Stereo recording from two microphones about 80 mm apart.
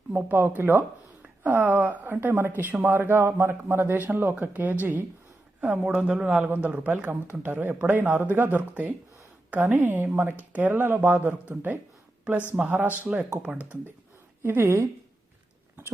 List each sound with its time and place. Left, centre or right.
0.1 s speech: right
14.4 s a woman's voice: right